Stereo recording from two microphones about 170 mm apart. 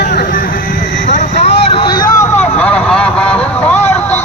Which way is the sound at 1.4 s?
30° left (ahead or behind).